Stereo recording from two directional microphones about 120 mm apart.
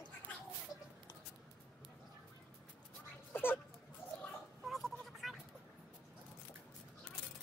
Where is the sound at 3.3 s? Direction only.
15° left (ahead or behind).